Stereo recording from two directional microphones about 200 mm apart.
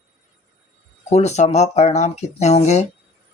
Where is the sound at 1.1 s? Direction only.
35° left (ahead or behind).